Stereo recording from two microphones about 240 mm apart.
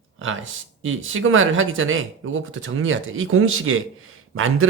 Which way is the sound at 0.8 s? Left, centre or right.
Right.